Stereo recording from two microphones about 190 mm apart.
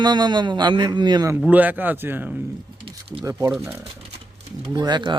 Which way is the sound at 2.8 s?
25° right (ahead or behind).